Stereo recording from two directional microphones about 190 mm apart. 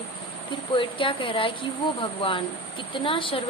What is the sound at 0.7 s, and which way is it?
A woman's voice, 25° left (ahead or behind).